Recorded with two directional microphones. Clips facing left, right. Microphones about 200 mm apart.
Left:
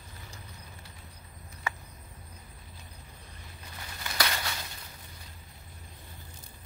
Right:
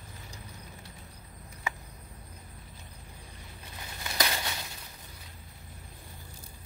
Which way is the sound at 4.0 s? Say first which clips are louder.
Right 1 dB; 20° right (ahead or behind).